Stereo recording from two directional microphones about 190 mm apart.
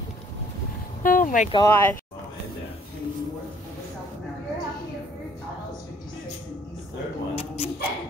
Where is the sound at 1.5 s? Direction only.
15° left (ahead or behind).